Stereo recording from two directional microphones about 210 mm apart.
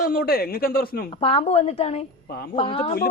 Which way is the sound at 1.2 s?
30° left (ahead or behind).